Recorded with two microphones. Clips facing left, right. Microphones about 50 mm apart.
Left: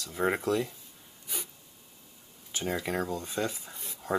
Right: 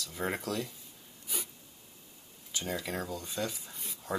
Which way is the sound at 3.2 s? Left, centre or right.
Left.